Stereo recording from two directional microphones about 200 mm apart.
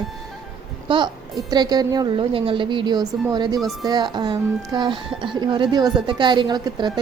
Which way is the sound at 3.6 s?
Centre (ahead or behind).